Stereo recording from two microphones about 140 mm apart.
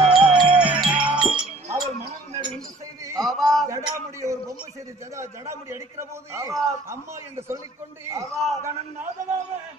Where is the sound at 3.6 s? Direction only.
20° right (ahead or behind).